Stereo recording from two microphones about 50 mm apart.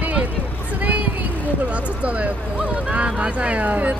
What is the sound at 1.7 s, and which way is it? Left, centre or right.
Speech, right.